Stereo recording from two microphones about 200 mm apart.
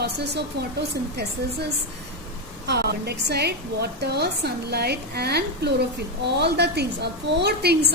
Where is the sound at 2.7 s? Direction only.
55° right (ahead or behind).